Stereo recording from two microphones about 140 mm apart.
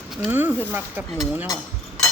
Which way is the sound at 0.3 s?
15° right (ahead or behind).